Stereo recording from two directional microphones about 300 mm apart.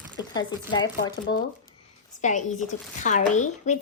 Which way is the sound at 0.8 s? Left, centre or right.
Left.